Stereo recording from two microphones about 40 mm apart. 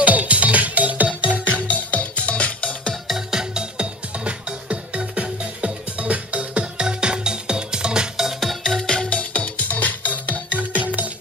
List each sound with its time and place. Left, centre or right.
0.0 s music: right
1.5 s music: left
3.2 s music: centre
8.4 s music: centre
8.8 s music: left
9.2 s music: left